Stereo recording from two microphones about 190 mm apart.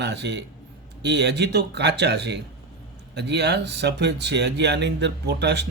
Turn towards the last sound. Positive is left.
turn(degrees=-65)  # may be behind; listen again after turning